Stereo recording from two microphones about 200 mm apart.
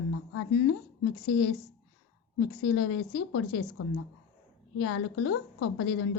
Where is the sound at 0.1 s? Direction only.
90° left.